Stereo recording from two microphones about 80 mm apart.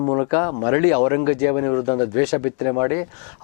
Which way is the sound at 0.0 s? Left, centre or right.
Left.